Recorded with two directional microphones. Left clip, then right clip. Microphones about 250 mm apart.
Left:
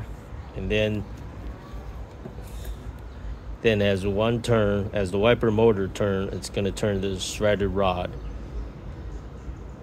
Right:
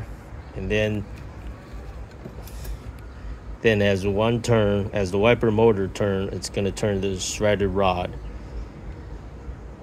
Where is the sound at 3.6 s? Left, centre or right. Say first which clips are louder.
Right 2 dB; centre.